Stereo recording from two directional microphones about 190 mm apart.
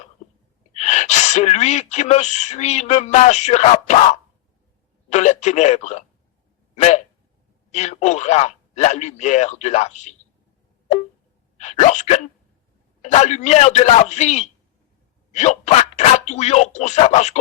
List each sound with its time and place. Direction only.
0.7 s speech: 35° left (ahead or behind)
11.6 s speech: 35° left (ahead or behind)